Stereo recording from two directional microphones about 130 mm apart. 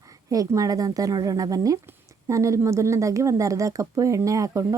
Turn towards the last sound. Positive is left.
turn(degrees=-25)  # may be behind; listen again after turning